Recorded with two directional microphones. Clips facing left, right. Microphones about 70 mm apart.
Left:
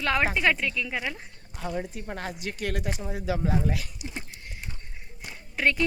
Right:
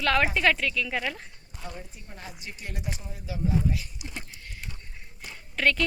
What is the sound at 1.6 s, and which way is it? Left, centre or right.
Speech, left.